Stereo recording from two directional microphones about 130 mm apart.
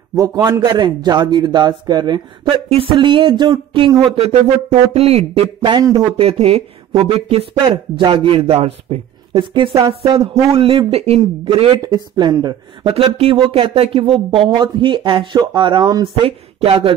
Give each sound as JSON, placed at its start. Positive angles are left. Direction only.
{"t": 0.2, "sound": "a man's voice", "side_deg": -30}
{"t": 5.6, "sound": "speech", "side_deg": -30}
{"t": 6.0, "sound": "a man's voice", "side_deg": -45}
{"t": 9.3, "sound": "a man's voice", "side_deg": -35}
{"t": 11.8, "sound": "speech", "side_deg": -30}
{"t": 12.9, "sound": "speech", "side_deg": -45}
{"t": 16.3, "sound": "speech", "side_deg": -45}